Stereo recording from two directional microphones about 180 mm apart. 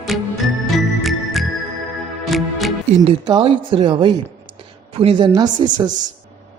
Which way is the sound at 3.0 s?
30° right (ahead or behind).